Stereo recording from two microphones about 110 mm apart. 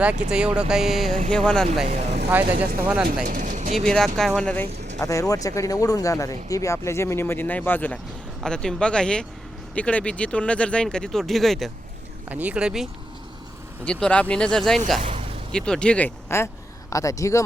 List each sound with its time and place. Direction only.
0.3 s speech: 10° right (ahead or behind)
1.8 s speech: 90° right
2.3 s speech: 15° right (ahead or behind)
3.8 s speech: 5° left (ahead or behind)
4.9 s speech: 30° left (ahead or behind)
8.4 s speech: 5° left (ahead or behind)
12.3 s speech: 15° right (ahead or behind)
13.8 s speech: 10° left (ahead or behind)
15.0 s a sound: 75° right (ahead or behind)
15.5 s speech: 5° left (ahead or behind)
16.9 s speech: 30° left (ahead or behind)